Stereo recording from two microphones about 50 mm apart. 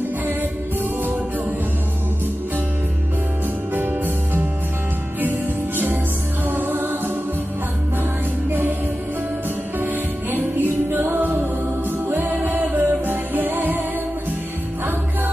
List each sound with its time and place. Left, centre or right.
3.7 s music: right
6.4 s music: right
8.5 s music: right
10.3 s music: right